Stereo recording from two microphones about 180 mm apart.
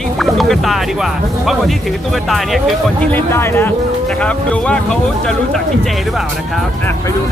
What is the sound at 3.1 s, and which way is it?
Speech, 15° left (ahead or behind).